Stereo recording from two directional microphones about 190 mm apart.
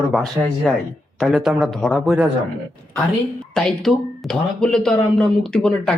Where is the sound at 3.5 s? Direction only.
Centre (ahead or behind).